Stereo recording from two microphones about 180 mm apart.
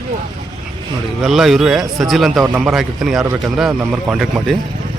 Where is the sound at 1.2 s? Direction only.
Centre (ahead or behind).